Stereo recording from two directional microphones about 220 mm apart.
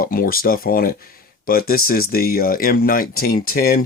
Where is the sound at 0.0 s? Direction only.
40° left (ahead or behind).